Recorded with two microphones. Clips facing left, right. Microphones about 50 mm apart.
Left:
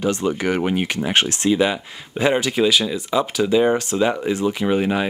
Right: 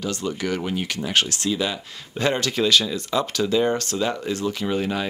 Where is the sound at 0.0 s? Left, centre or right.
Left.